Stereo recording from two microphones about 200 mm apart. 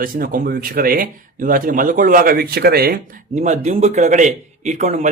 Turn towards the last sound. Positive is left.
turn(degrees=-35)  # may be behind; listen again after turning